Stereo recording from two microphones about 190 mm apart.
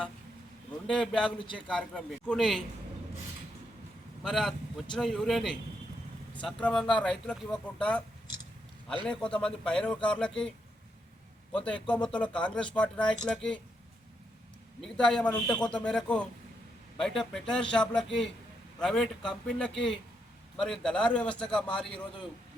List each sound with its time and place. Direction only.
0.9 s speech: 5° left (ahead or behind)
4.2 s speech: centre (ahead or behind)
9.0 s speech: 5° left (ahead or behind)
11.5 s speech: 5° left (ahead or behind)
14.8 s speech: 5° left (ahead or behind)